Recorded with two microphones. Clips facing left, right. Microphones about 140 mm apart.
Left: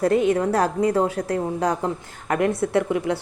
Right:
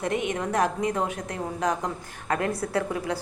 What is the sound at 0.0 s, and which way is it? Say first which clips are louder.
A woman's voice: left 9 dB; 35° left (ahead or behind).